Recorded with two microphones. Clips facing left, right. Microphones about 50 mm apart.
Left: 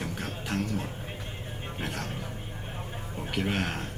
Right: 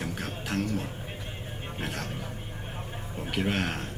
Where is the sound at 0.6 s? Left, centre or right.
Centre.